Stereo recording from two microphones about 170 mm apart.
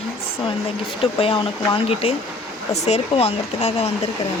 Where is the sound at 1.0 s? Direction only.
35° left (ahead or behind).